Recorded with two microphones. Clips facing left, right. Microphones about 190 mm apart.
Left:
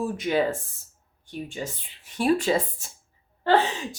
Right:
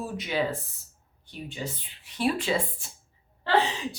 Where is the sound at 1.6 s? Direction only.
45° left (ahead or behind).